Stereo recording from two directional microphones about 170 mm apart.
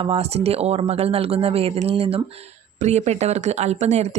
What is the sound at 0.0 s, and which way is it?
Speech, 35° right (ahead or behind).